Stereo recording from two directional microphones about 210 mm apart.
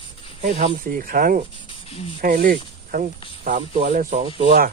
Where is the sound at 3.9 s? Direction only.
40° right (ahead or behind).